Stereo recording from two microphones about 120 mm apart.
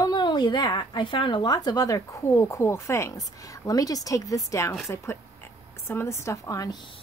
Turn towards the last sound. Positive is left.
turn(degrees=30)  # may be behind; listen again after turning